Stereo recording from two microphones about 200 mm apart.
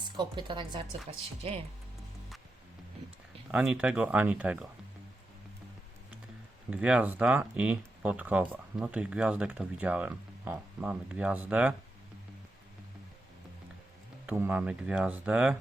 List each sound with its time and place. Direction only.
0.2 s speech: 20° right (ahead or behind)
3.5 s speech: 5° right (ahead or behind)
6.7 s speech: 5° right (ahead or behind)
14.3 s speech: 10° right (ahead or behind)